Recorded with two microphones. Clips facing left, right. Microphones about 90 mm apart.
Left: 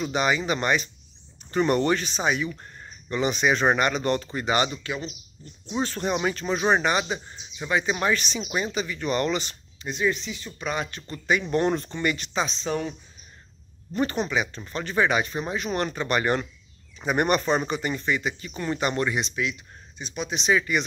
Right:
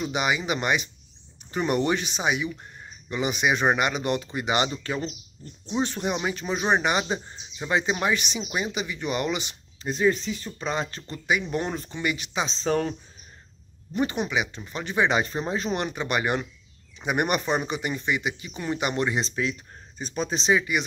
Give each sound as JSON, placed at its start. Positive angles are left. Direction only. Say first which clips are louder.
{"t": 0.0, "sound": "speech", "louder": "left 2 dB", "side_deg": -15}
{"t": 4.8, "sound": "speech", "louder": "right 2 dB", "side_deg": -35}
{"t": 5.7, "sound": "speech", "louder": "even", "side_deg": -20}
{"t": 9.8, "sound": "speech", "louder": "right 3 dB", "side_deg": -35}
{"t": 10.6, "sound": "speech", "louder": "left 1 dB", "side_deg": -25}
{"t": 11.5, "sound": "speech", "louder": "left 5 dB", "side_deg": -5}
{"t": 12.4, "sound": "speech", "louder": "right 3 dB", "side_deg": -35}
{"t": 13.9, "sound": "speech", "louder": "left 1 dB", "side_deg": -15}
{"t": 15.7, "sound": "speech", "louder": "left 5 dB", "side_deg": -15}